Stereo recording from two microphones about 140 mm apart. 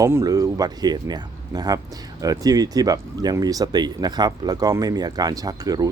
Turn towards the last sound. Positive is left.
turn(degrees=-25)  # may be behind; listen again after turning